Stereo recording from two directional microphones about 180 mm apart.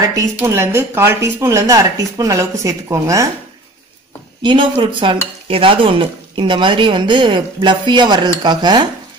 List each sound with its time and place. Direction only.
0.1 s a woman's voice: 15° right (ahead or behind)
4.4 s speech: 25° right (ahead or behind)